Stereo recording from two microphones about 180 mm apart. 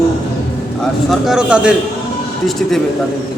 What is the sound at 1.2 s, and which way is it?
Speech, 5° right (ahead or behind).